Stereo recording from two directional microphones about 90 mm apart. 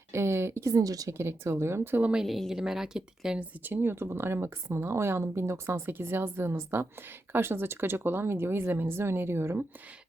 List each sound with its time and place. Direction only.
0.1 s speech: 30° right (ahead or behind)
1.1 s speech: 30° right (ahead or behind)
2.2 s speech: centre (ahead or behind)
3.6 s speech: 20° right (ahead or behind)